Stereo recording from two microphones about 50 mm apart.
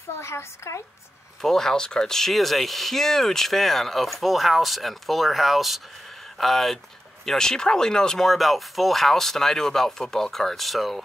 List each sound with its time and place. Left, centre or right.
0.1 s a woman's voice: left
1.4 s speech: centre
8.3 s speech: centre